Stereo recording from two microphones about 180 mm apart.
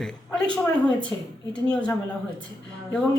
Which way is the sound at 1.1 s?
15° left (ahead or behind).